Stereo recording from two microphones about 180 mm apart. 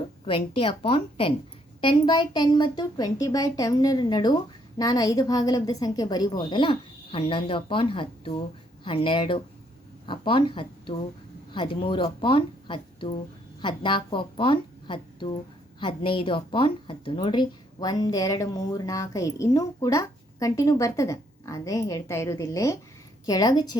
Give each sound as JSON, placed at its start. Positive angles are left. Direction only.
{"t": 0.3, "sound": "a woman's voice", "side_deg": 30}